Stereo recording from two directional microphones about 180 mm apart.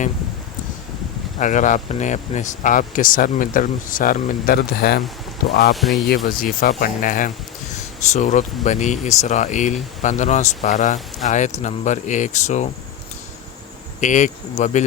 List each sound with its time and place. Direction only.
1.4 s speech: 45° left (ahead or behind); by 5.0 s 60° left (ahead or behind)
5.7 s speech: centre (ahead or behind)
6.2 s speech: 50° left (ahead or behind)
14.0 s speech: 45° left (ahead or behind)